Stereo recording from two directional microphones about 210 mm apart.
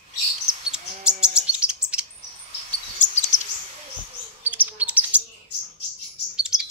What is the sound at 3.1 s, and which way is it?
Chirp, 35° left (ahead or behind).